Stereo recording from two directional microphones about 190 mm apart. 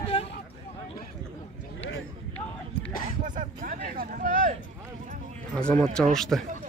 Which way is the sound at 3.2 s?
45° right (ahead or behind).